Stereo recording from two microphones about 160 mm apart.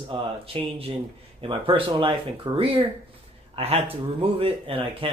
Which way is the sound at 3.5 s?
40° right (ahead or behind).